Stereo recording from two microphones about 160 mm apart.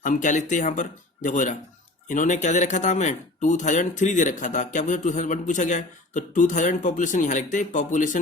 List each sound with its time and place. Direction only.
0.0 s speech: 50° left (ahead or behind)